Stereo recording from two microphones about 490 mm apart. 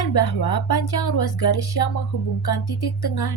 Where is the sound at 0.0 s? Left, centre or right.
Left.